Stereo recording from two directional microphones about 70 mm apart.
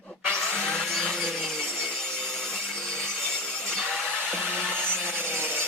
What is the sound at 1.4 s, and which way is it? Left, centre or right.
Wood, centre.